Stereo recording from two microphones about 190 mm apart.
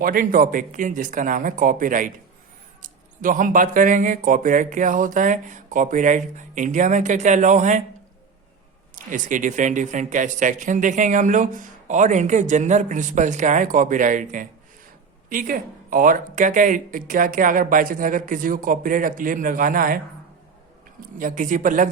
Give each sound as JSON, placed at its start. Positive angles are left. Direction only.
{"t": 0.0, "sound": "speech", "side_deg": -50}
{"t": 9.0, "sound": "speech", "side_deg": -45}
{"t": 21.0, "sound": "speech", "side_deg": -45}